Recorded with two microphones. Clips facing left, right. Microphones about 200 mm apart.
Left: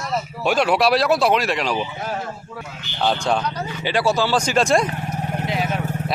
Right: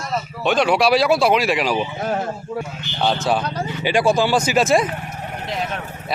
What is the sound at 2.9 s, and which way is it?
Speech, 5° right (ahead or behind).